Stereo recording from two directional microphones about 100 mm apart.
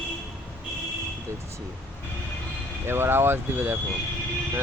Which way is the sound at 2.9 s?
25° right (ahead or behind).